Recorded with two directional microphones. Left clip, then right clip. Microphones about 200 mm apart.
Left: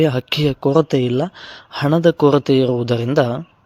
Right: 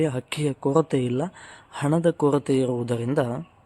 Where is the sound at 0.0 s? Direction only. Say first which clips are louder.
Left 9 dB; 25° left (ahead or behind).